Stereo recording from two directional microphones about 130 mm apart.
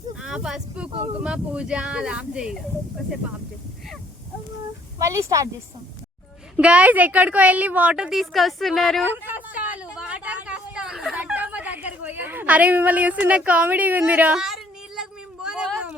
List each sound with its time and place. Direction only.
0.2 s speech: 5° right (ahead or behind)
4.9 s speech: 25° right (ahead or behind)
6.6 s speech: 10° right (ahead or behind)
9.2 s a sound: 15° right (ahead or behind)